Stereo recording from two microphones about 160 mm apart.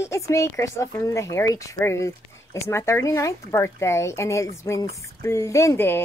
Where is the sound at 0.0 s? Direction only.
20° left (ahead or behind).